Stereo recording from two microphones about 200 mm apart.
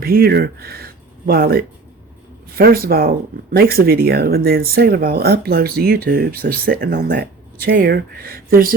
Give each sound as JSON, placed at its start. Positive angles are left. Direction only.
{"t": 0.0, "sound": "speech", "side_deg": -50}